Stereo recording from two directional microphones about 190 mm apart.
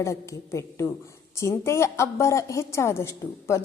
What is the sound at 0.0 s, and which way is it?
A woman's voice, 15° left (ahead or behind).